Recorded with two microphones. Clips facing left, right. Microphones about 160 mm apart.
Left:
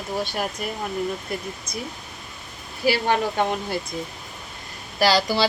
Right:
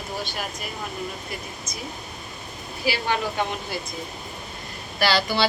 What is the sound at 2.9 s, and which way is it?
Speech, 45° left (ahead or behind).